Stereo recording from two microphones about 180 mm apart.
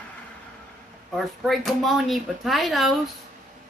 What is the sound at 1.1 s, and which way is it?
Speech, centre (ahead or behind).